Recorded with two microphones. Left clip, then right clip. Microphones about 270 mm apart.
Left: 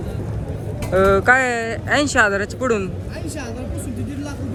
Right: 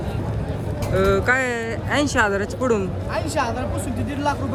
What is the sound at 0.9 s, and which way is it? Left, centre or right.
Speech, centre.